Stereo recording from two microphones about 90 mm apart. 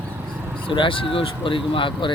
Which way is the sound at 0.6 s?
70° left (ahead or behind).